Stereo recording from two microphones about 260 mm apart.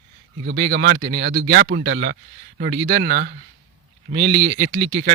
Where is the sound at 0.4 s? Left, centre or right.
Right.